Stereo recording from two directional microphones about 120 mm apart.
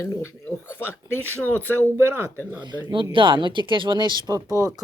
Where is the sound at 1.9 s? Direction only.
20° right (ahead or behind).